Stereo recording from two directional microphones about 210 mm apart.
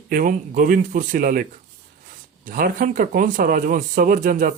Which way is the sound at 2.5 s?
40° right (ahead or behind).